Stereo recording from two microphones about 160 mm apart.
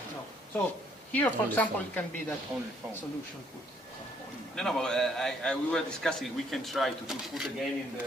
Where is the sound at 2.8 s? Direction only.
15° right (ahead or behind).